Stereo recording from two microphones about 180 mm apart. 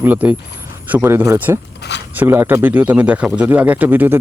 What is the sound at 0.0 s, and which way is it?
Speech, 10° right (ahead or behind).